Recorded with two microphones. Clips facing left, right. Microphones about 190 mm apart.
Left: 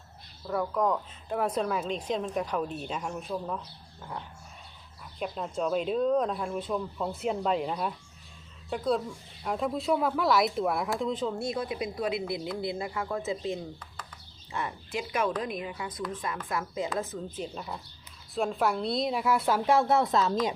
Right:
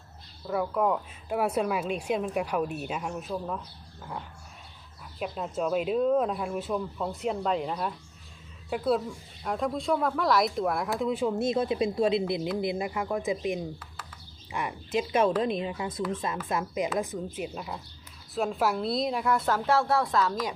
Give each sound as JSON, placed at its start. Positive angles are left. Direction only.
{"t": 0.4, "sound": "speech", "side_deg": -5}
{"t": 5.2, "sound": "speech", "side_deg": -5}
{"t": 11.0, "sound": "a woman's voice", "side_deg": -10}